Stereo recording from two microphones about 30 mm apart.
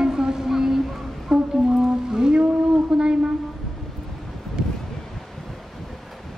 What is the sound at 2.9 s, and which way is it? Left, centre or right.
Speech, centre.